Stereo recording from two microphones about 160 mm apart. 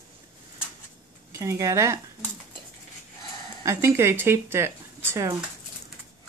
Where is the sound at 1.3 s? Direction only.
20° right (ahead or behind).